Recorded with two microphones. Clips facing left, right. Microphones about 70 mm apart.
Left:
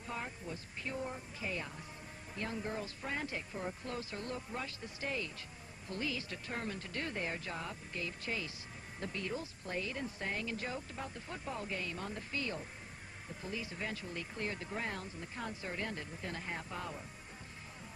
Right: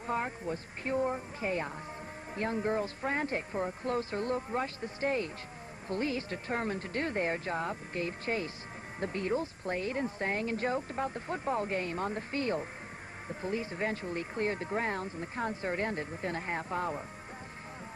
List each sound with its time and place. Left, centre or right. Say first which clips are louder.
0.0 s speech: right 9 dB; right